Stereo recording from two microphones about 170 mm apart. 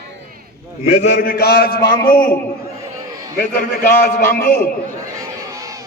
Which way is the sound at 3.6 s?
55° left (ahead or behind).